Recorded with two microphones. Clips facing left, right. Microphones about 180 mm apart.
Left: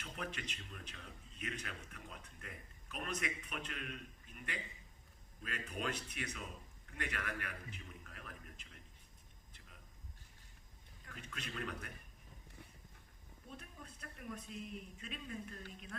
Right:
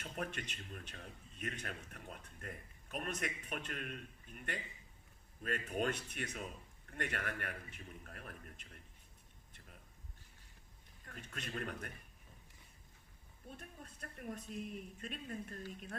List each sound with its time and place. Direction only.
0.0 s speech: 50° right (ahead or behind)
11.0 s speech: 45° right (ahead or behind)
13.6 s speech: 45° right (ahead or behind)